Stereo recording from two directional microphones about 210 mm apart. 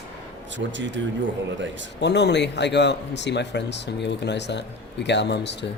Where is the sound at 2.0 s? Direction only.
55° left (ahead or behind).